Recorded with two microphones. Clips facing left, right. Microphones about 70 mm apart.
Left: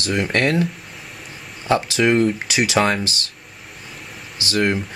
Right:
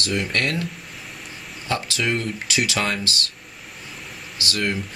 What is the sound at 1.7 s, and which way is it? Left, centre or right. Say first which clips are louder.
Speech: left 7 dB; left.